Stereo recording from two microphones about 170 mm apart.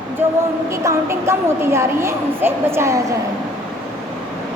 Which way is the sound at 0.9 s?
15° right (ahead or behind).